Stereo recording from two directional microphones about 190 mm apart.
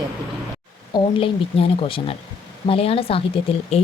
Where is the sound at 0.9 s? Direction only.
30° left (ahead or behind).